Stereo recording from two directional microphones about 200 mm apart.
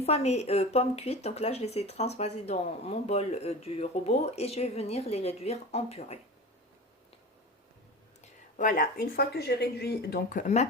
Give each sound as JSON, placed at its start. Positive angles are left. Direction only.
{"t": 0.0, "sound": "speech", "side_deg": 30}
{"t": 8.5, "sound": "speech", "side_deg": 40}